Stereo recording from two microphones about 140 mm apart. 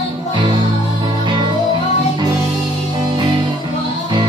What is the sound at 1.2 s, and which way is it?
Music, 35° right (ahead or behind).